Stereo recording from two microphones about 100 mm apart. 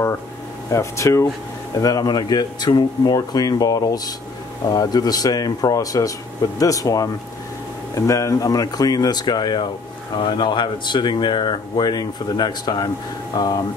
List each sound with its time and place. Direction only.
0.7 s speech: 30° left (ahead or behind); by 13.5 s 45° left (ahead or behind)